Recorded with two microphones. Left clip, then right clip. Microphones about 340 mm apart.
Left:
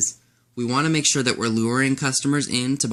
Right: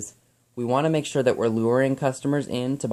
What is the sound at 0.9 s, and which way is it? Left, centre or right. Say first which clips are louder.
Speech: left 4 dB; centre.